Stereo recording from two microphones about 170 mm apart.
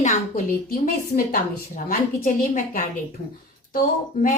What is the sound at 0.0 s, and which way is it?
A woman's voice, 45° left (ahead or behind).